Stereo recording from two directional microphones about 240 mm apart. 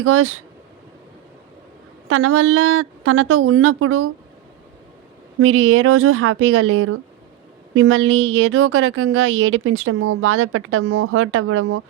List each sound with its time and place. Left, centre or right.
0.0 s a woman's voice: right
2.0 s a woman's voice: right
5.4 s a woman's voice: right